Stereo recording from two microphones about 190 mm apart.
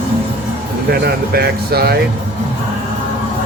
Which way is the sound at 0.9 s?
55° right (ahead or behind).